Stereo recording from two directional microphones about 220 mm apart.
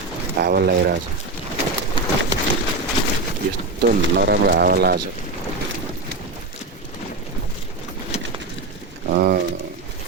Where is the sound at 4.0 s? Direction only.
50° right (ahead or behind).